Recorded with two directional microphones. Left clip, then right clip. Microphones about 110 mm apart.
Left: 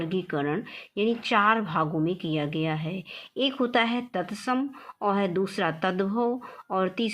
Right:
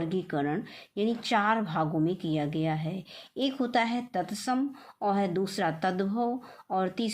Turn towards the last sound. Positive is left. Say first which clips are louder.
# left 3 dB
turn(degrees=45)  # may be behind; listen again after turning